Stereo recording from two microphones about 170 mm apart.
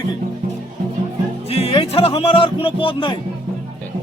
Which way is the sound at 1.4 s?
35° left (ahead or behind).